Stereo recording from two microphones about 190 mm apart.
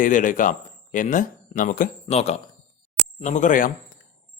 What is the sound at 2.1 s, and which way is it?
Speech, 35° left (ahead or behind).